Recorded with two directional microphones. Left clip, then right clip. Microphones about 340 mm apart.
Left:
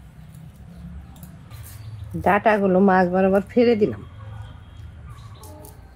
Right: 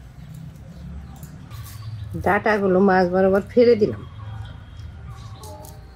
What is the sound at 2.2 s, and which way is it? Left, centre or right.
Speech, centre.